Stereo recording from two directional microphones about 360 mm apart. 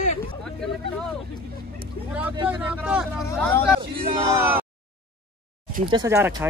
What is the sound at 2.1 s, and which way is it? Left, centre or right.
Speech, centre.